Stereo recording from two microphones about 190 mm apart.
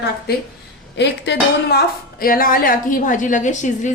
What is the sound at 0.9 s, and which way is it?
A woman's voice, 65° left (ahead or behind).